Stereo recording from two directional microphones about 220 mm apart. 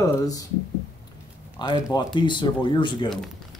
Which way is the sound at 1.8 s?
20° left (ahead or behind).